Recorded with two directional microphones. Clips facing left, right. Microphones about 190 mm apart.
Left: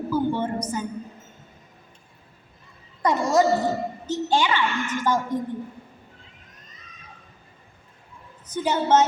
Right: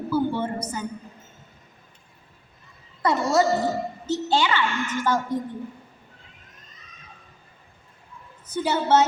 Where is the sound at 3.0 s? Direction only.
15° left (ahead or behind).